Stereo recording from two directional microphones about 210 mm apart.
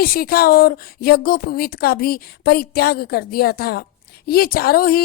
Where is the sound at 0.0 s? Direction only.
45° left (ahead or behind).